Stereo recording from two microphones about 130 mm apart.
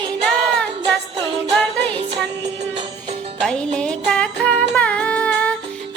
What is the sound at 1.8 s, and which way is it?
Music, 55° right (ahead or behind).